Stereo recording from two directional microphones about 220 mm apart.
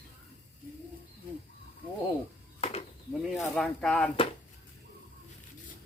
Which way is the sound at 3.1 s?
Centre (ahead or behind).